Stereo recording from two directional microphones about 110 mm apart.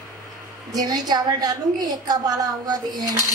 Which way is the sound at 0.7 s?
35° right (ahead or behind).